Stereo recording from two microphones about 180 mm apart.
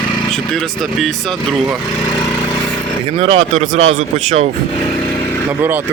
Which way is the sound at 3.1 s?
35° right (ahead or behind).